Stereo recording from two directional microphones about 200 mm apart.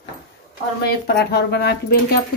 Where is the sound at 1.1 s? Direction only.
55° left (ahead or behind).